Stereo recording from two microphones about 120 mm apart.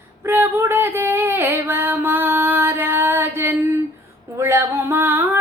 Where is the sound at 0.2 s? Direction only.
20° right (ahead or behind).